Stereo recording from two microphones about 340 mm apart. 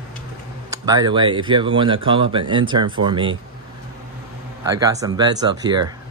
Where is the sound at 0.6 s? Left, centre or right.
Centre.